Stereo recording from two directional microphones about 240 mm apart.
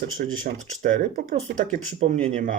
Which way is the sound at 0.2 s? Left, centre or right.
Right.